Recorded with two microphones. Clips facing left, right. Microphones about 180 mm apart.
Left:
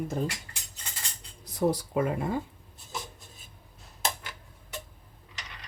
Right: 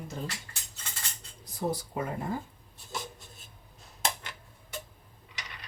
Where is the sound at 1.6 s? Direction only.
75° left (ahead or behind).